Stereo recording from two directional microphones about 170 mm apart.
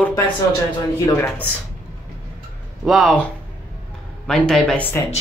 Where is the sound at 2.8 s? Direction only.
Centre (ahead or behind).